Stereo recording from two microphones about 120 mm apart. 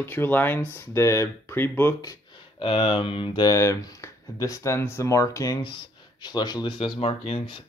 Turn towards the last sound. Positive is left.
turn(degrees=45)  # may be behind; listen again after turning